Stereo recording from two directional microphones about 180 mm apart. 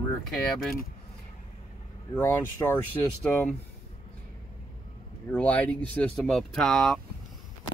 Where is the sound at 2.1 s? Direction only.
10° left (ahead or behind).